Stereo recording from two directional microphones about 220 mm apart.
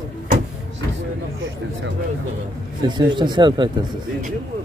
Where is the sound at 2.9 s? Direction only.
20° right (ahead or behind).